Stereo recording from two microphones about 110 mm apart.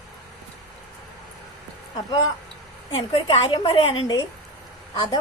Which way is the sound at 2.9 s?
50° left (ahead or behind).